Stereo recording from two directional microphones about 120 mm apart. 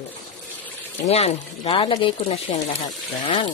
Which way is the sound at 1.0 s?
60° left (ahead or behind).